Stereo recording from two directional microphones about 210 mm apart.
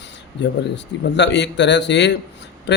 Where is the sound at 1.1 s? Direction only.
55° left (ahead or behind).